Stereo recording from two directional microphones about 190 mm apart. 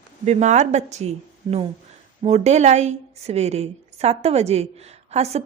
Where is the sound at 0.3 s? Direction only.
40° right (ahead or behind).